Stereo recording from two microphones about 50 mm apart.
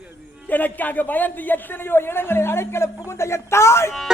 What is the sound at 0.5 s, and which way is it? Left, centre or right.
A man's voice, left.